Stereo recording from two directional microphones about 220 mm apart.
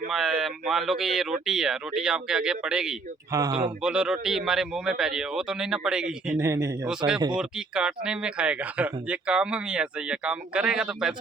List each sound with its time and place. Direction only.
0.1 s speech: centre (ahead or behind)
3.3 s speech: 20° right (ahead or behind)
3.8 s speech: 5° right (ahead or behind)
6.4 s speech: 15° right (ahead or behind)
7.3 s speech: 5° right (ahead or behind)